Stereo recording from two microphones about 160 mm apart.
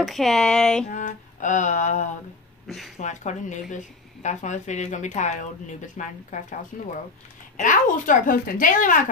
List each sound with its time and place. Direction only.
0.0 s speech: centre (ahead or behind)
0.8 s speech: 50° left (ahead or behind)
2.6 s speech: centre (ahead or behind)
3.0 s speech: 50° left (ahead or behind)